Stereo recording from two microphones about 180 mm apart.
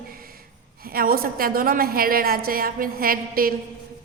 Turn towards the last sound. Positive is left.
turn(degrees=-55)  # may be behind; listen again after turning